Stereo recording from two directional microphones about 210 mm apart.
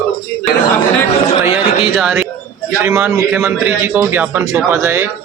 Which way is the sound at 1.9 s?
Centre (ahead or behind).